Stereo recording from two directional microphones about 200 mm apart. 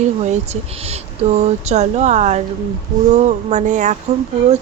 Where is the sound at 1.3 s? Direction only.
35° right (ahead or behind).